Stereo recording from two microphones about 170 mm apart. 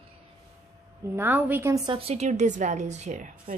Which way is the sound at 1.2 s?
10° right (ahead or behind).